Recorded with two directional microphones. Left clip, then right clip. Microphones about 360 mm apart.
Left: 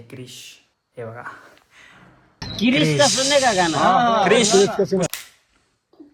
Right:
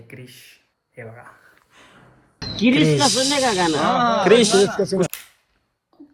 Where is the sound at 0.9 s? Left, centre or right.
Centre.